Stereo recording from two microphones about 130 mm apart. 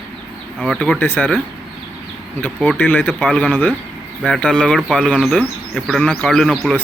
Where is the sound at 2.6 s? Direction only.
15° left (ahead or behind).